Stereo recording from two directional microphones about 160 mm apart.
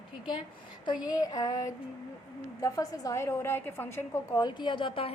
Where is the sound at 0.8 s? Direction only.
25° left (ahead or behind).